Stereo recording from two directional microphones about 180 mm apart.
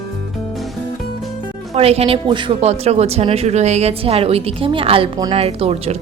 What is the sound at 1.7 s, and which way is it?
Speech, 35° right (ahead or behind).